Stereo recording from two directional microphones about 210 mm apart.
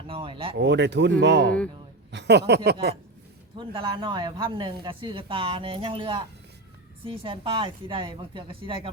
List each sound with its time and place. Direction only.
0.1 s speech: 25° right (ahead or behind)
0.5 s speech: 55° right (ahead or behind)
3.6 s speech: 25° right (ahead or behind)